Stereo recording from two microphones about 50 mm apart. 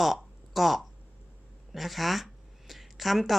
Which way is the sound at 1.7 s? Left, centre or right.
Centre.